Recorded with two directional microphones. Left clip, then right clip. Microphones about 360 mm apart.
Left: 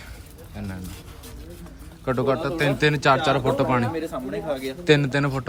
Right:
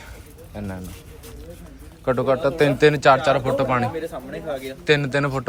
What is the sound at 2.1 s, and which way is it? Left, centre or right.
A man's voice, centre.